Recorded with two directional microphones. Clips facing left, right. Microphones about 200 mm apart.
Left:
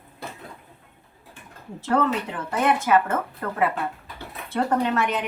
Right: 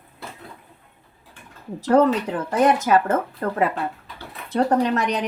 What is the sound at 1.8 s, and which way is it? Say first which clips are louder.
Speech: right 6 dB; 40° right (ahead or behind).